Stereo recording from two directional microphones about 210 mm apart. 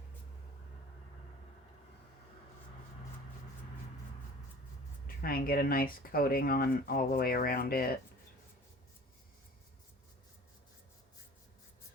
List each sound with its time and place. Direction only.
5.0 s speech: 45° left (ahead or behind)